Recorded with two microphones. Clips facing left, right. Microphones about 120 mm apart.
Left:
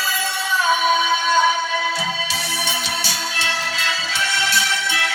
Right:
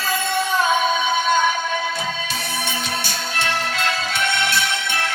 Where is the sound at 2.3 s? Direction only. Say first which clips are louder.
Even; 50° right (ahead or behind).